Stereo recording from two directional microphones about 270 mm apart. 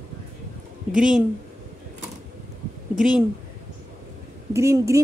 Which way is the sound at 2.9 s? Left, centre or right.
Centre.